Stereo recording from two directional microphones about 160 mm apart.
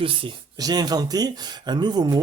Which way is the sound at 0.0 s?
35° right (ahead or behind).